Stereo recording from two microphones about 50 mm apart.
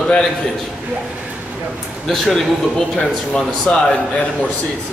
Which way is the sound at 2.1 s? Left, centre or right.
Centre.